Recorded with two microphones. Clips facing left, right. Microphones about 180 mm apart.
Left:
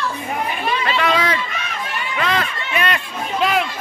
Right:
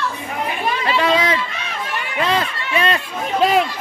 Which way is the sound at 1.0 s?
25° right (ahead or behind).